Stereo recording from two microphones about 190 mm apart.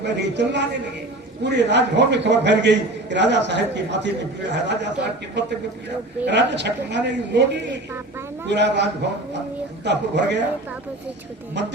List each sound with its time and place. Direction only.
0.0 s a man's voice: 65° right (ahead or behind)